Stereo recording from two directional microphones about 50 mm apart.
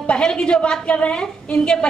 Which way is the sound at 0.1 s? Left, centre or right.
Centre.